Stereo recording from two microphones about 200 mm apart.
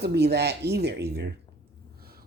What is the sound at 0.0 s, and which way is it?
Speech, 55° right (ahead or behind).